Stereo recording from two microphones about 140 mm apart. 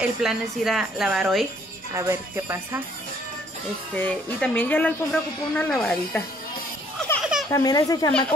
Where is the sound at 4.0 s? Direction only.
10° left (ahead or behind).